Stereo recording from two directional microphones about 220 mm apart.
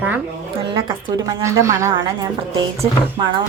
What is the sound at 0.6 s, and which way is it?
A woman's voice, 20° right (ahead or behind).